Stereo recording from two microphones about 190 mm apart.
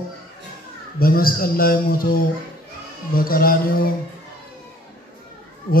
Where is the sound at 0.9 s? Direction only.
50° left (ahead or behind).